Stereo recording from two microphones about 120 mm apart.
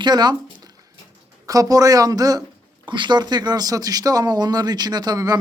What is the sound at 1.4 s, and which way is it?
Speech, 30° right (ahead or behind).